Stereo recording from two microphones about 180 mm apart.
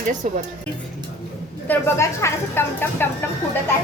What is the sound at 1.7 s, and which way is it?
A child's voice, 15° left (ahead or behind).